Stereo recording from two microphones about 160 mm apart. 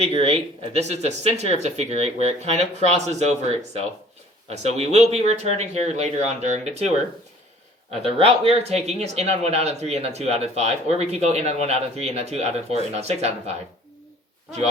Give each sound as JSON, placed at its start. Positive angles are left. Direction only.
{"t": 0.2, "sound": "speech", "side_deg": -40}
{"t": 4.4, "sound": "speech", "side_deg": -45}
{"t": 8.0, "sound": "speech", "side_deg": -35}